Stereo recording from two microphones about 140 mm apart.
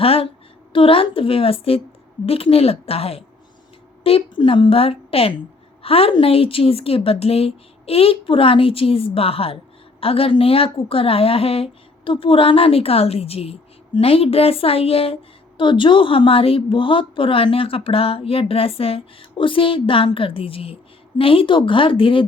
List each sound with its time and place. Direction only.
0.0 s a woman's voice: 45° left (ahead or behind)